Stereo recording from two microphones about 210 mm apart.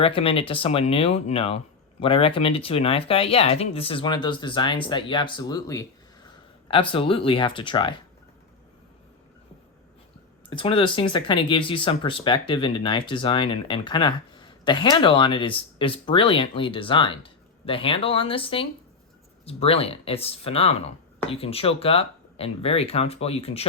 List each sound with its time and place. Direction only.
0.0 s speech: 25° left (ahead or behind)
10.5 s speech: 25° left (ahead or behind)